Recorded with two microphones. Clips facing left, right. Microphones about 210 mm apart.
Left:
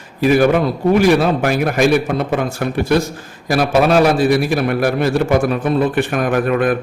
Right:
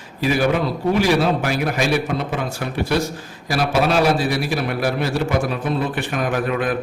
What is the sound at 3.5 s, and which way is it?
A man's voice, 50° left (ahead or behind).